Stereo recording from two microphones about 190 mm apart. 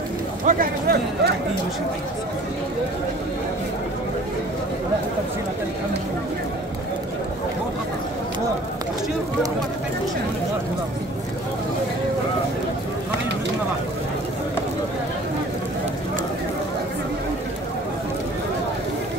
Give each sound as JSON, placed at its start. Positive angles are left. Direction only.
{"t": 0.5, "sound": "speech", "side_deg": -50}